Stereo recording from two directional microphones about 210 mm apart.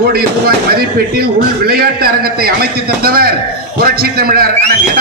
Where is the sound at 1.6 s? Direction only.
45° right (ahead or behind).